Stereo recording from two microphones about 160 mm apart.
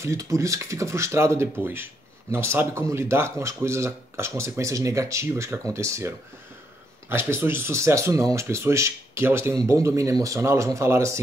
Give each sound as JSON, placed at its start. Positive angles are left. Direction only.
{"t": 0.0, "sound": "speech", "side_deg": -20}